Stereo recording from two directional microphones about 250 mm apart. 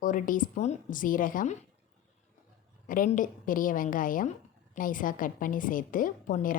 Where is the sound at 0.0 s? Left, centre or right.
Left.